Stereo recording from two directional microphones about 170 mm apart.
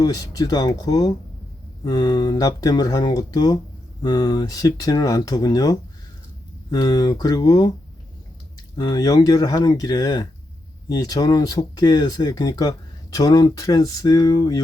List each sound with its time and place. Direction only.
0.0 s speech: 20° left (ahead or behind)
8.7 s speech: 25° left (ahead or behind)